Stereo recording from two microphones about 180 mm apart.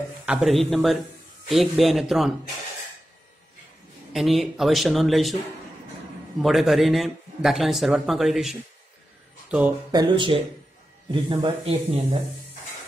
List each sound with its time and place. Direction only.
0.2 s a man's voice: 5° right (ahead or behind)
4.1 s a man's voice: centre (ahead or behind)
6.4 s a man's voice: centre (ahead or behind)
9.8 s a man's voice: 25° right (ahead or behind)